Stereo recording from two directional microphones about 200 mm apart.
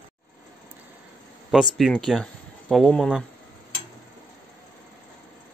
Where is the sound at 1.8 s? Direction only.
Centre (ahead or behind).